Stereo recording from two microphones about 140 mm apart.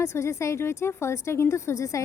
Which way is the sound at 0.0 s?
20° left (ahead or behind).